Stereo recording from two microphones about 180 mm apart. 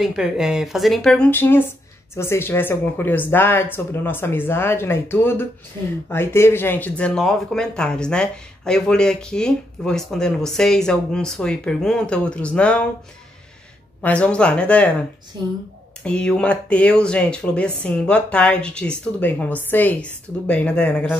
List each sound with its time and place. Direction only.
0.0 s speech: 5° right (ahead or behind)
14.0 s speech: 5° left (ahead or behind)